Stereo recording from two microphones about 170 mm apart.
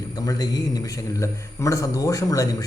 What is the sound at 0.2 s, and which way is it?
A man's voice, 25° left (ahead or behind).